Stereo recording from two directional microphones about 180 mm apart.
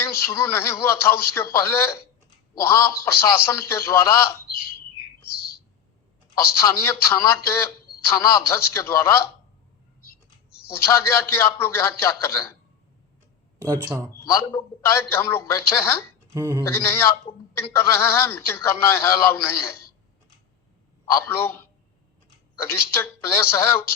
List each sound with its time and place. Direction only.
0.0 s speech: 15° left (ahead or behind)
6.3 s speech: 15° left (ahead or behind)
10.7 s speech: 15° left (ahead or behind)
13.6 s speech: 20° right (ahead or behind)
14.1 s speech: 15° left (ahead or behind)
16.3 s speech: 15° right (ahead or behind)
16.6 s speech: 15° left (ahead or behind)
17.3 s a man's voice: 30° left (ahead or behind)
17.6 s speech: 15° left (ahead or behind)
21.2 s speech: 10° left (ahead or behind)